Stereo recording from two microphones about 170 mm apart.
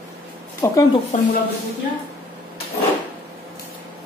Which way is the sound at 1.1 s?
45° left (ahead or behind).